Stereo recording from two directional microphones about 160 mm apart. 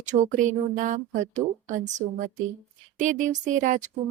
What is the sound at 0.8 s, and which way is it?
Speech, 55° right (ahead or behind).